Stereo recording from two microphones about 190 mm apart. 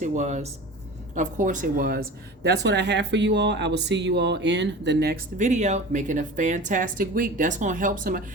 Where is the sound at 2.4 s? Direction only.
60° right (ahead or behind).